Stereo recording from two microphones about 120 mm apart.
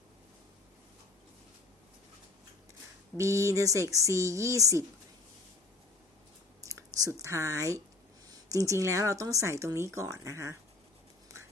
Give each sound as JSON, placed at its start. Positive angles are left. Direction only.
{"t": 3.2, "sound": "speech", "side_deg": -25}
{"t": 6.7, "sound": "speech", "side_deg": -30}